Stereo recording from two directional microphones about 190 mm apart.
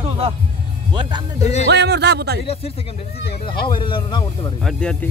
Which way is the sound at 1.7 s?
60° right (ahead or behind).